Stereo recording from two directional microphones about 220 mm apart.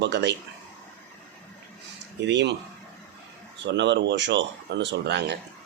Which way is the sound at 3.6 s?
50° right (ahead or behind).